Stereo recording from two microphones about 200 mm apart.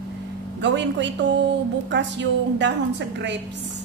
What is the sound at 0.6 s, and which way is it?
Speech, 60° right (ahead or behind).